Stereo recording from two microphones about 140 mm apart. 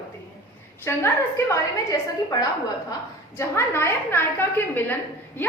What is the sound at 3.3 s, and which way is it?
A woman's voice, 20° left (ahead or behind).